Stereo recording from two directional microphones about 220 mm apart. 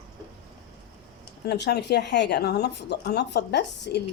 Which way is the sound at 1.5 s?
50° left (ahead or behind).